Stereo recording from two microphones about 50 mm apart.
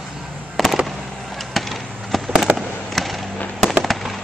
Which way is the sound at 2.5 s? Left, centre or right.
Right.